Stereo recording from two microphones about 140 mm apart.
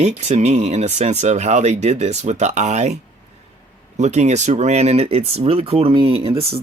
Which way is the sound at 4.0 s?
55° right (ahead or behind).